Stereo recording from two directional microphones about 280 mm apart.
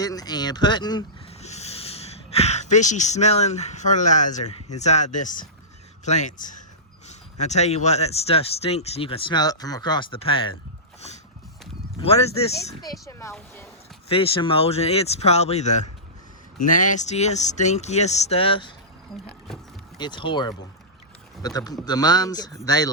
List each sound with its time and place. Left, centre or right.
0.0 s speech: centre
11.9 s speech: left
13.1 s speech: centre
20.0 s speech: centre